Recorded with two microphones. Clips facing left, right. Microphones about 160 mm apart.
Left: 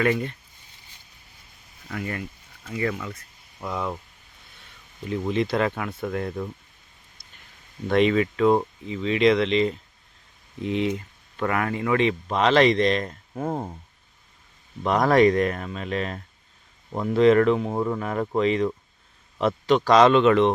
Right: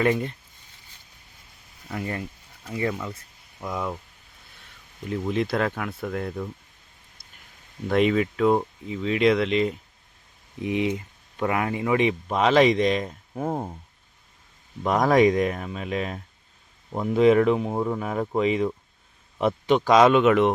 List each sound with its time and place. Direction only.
0.0 s speech: 25° right (ahead or behind)
1.9 s speech: 25° right (ahead or behind)
3.6 s speech: 5° right (ahead or behind)
7.9 s speech: 5° right (ahead or behind)
10.6 s speech: 15° right (ahead or behind)
14.8 s speech: 5° right (ahead or behind)